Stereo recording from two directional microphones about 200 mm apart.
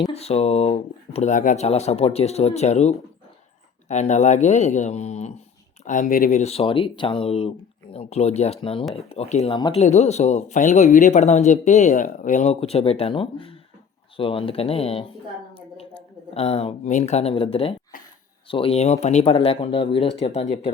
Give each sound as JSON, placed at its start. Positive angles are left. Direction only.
{"t": 0.1, "sound": "speech", "side_deg": 30}
{"t": 9.6, "sound": "speech", "side_deg": 20}
{"t": 9.8, "sound": "speech", "side_deg": 35}
{"t": 16.3, "sound": "speech", "side_deg": 30}